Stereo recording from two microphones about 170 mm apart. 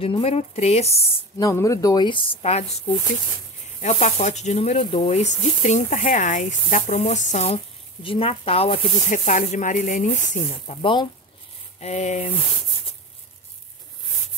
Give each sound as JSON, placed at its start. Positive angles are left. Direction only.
{"t": 0.0, "sound": "speech", "side_deg": 35}
{"t": 1.4, "sound": "speech", "side_deg": 20}
{"t": 3.8, "sound": "speech", "side_deg": 45}
{"t": 11.8, "sound": "speech", "side_deg": 40}